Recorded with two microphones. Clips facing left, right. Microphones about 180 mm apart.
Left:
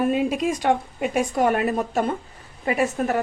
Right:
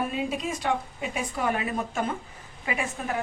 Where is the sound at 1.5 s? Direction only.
40° left (ahead or behind).